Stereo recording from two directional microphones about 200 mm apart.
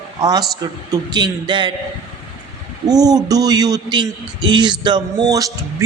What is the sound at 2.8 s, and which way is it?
Speech, 20° right (ahead or behind).